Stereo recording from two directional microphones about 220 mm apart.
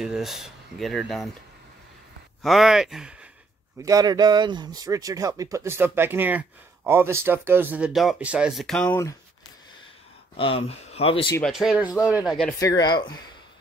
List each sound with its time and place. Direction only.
0.0 s speech: centre (ahead or behind)
2.4 s speech: centre (ahead or behind)
3.8 s speech: 15° right (ahead or behind); by 9.1 s 5° left (ahead or behind)
10.3 s speech: 25° left (ahead or behind)
11.3 s speech: centre (ahead or behind)
12.5 s speech: 15° left (ahead or behind)